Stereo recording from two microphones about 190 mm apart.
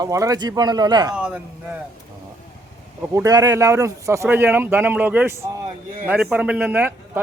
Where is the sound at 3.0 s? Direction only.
15° right (ahead or behind).